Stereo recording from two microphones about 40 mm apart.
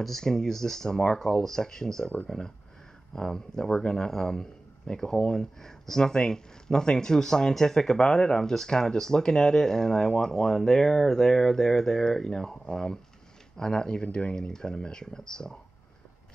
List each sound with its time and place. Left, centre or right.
0.2 s speech: centre